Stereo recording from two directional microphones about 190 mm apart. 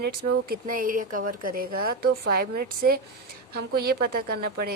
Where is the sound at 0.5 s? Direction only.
45° right (ahead or behind).